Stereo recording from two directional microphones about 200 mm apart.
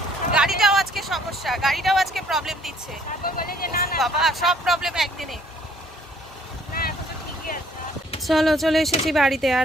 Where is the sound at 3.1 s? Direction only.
45° left (ahead or behind).